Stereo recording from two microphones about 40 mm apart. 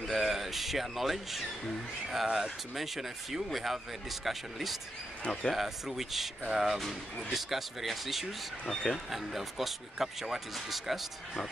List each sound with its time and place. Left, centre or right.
0.0 s speech: centre
5.2 s speech: left
5.5 s speech: centre
6.8 s speech: centre
7.3 s speech: centre
8.6 s speech: centre
9.1 s speech: centre